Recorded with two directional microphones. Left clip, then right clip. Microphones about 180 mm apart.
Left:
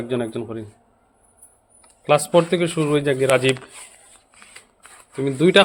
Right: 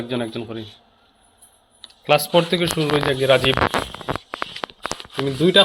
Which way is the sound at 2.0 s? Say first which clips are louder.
Even; 15° left (ahead or behind).